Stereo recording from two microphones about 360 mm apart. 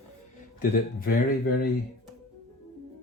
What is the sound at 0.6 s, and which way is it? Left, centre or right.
Speech, left.